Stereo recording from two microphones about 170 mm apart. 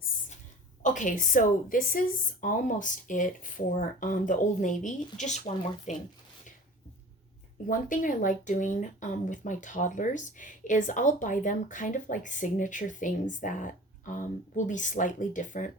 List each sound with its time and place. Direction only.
0.8 s speech: 50° left (ahead or behind)
7.7 s speech: 50° left (ahead or behind)